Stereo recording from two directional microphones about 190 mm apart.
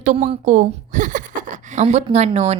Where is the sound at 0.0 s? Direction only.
35° right (ahead or behind).